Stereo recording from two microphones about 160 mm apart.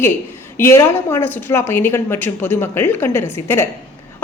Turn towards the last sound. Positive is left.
turn(degrees=15)  # may be behind; listen again after turning